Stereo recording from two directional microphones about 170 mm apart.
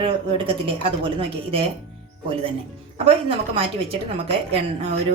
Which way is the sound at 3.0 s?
35° right (ahead or behind).